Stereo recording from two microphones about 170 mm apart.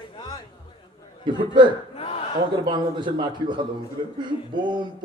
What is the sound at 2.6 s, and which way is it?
A man's voice, 25° right (ahead or behind).